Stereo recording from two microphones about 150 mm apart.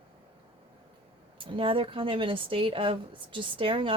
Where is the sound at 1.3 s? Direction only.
35° right (ahead or behind).